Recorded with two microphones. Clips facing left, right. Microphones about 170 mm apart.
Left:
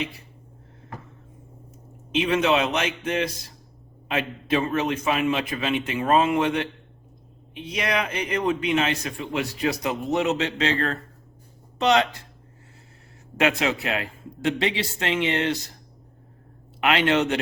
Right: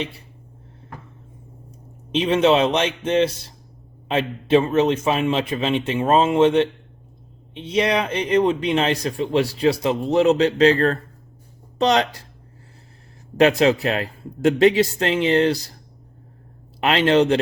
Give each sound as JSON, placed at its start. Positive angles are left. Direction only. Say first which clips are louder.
{"t": 2.1, "sound": "a man's voice", "louder": "right 5 dB", "side_deg": -30}
{"t": 13.3, "sound": "a man's voice", "louder": "right 7 dB", "side_deg": -35}
{"t": 16.8, "sound": "a man's voice", "louder": "right 4 dB", "side_deg": -35}